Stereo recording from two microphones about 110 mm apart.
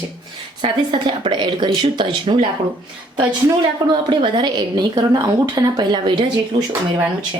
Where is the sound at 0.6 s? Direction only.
50° right (ahead or behind).